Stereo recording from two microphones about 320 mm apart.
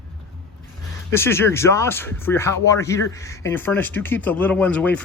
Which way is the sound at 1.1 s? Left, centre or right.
Centre.